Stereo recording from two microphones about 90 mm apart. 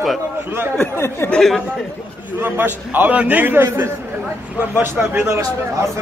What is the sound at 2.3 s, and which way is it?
Speech, 20° right (ahead or behind).